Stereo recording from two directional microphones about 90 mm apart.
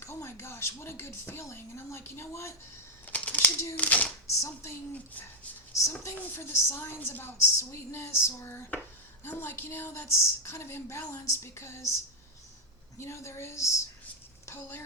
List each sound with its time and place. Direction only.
0.0 s speech: 30° left (ahead or behind)
3.1 s a sound: 20° left (ahead or behind)
3.8 s speech: 15° left (ahead or behind)
4.4 s a woman's voice: 35° left (ahead or behind)
5.8 s a woman's voice: 35° left (ahead or behind)
13.0 s a woman's voice: 30° left (ahead or behind)